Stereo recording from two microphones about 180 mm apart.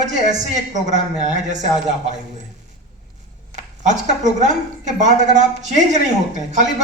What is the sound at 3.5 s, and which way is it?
A woman's voice, 40° right (ahead or behind).